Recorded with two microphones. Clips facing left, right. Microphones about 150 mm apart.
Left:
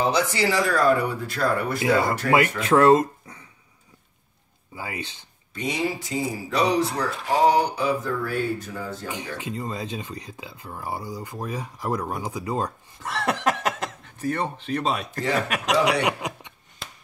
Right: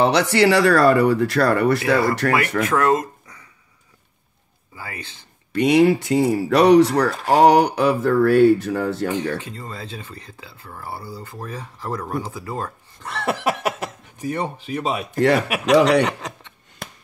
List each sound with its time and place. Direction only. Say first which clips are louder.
0.0 s speech: right 6 dB; 75° right (ahead or behind)
2.2 s speech: left 3 dB; 65° right (ahead or behind)
2.7 s a sound: left 5 dB; 30° left (ahead or behind)
4.7 s speech: left 2 dB; 15° left (ahead or behind)
5.5 s speech: right 12 dB; 70° right (ahead or behind)
9.4 s speech: left 3 dB; 15° left (ahead or behind)
13.0 s speech: right 1 dB; centre (ahead or behind)
15.1 s speech: right 12 dB; 70° right (ahead or behind)
15.4 s speech: right 3 dB; 10° right (ahead or behind)
15.8 s speech: right 5 dB; 10° left (ahead or behind)